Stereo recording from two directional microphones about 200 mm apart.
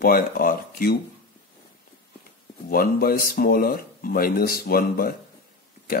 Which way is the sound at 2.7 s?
45° left (ahead or behind).